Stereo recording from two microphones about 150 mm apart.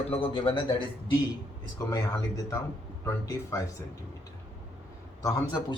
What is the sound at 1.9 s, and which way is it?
A man's voice, 20° left (ahead or behind).